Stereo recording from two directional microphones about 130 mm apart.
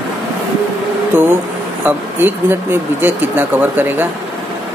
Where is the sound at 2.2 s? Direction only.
15° right (ahead or behind).